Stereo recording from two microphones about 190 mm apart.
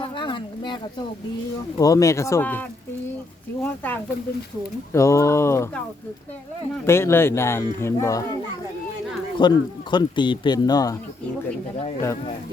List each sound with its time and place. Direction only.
0.0 s a sound: 25° left (ahead or behind)
1.8 s speech: 15° left (ahead or behind)
6.8 s speech: 15° left (ahead or behind)
9.4 s speech: 25° left (ahead or behind)